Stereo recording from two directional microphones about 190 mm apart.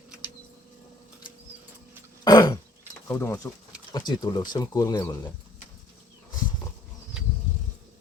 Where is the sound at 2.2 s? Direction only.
20° left (ahead or behind).